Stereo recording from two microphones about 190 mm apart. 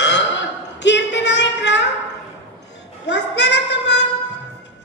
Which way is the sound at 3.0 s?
65° left (ahead or behind).